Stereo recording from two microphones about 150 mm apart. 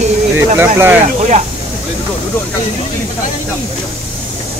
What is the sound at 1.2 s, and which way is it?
Speech, 50° right (ahead or behind).